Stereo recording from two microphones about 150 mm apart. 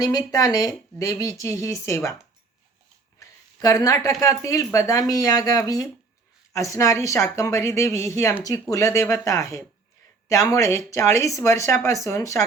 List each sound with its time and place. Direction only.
0.0 s speech: 25° left (ahead or behind)
3.2 s a sound: 25° left (ahead or behind)
4.2 s speech: 20° left (ahead or behind)